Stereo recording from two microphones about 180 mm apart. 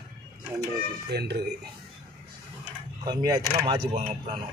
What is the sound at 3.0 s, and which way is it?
Speech, 25° right (ahead or behind).